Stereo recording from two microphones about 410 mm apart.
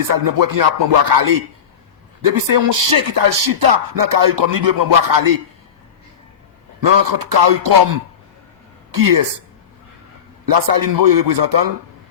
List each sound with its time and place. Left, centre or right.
0.1 s speech: right
7.0 s speech: right
10.4 s speech: right